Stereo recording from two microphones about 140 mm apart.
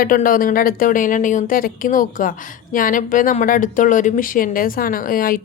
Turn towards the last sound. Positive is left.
turn(degrees=90)